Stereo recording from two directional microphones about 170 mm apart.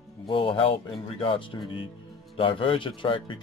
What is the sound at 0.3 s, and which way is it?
Speech, 30° left (ahead or behind).